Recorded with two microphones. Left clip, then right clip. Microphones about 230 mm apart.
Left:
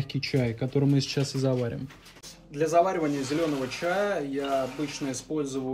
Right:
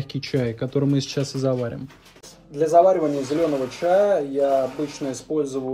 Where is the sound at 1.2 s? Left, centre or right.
Centre.